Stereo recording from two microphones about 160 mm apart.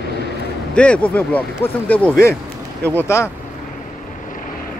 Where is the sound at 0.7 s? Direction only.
5° left (ahead or behind).